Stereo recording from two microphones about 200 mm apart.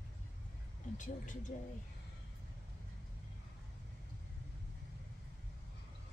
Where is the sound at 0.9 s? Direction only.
40° left (ahead or behind).